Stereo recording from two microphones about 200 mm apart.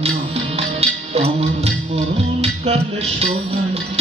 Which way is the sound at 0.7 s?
30° right (ahead or behind).